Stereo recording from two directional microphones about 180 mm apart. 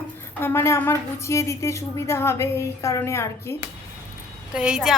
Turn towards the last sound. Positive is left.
turn(degrees=0)  # may be behind; listen again after turning